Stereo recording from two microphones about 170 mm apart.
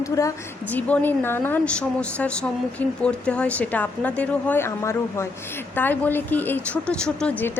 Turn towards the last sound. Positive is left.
turn(degrees=5)  # may be behind; listen again after turning